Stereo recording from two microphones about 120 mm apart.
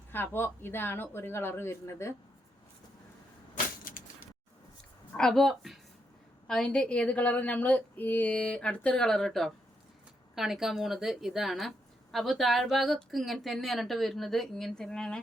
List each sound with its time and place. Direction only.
0.1 s speech: 20° left (ahead or behind)
5.1 s a woman's voice: 5° left (ahead or behind)